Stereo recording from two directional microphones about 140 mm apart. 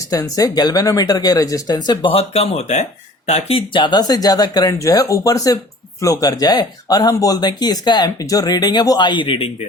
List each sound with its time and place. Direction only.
0.1 s speech: 25° left (ahead or behind); by 3.6 s 50° left (ahead or behind)
3.7 s speech: 35° left (ahead or behind)